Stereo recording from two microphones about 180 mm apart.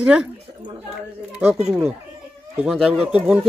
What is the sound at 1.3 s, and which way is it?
Speech, 5° right (ahead or behind).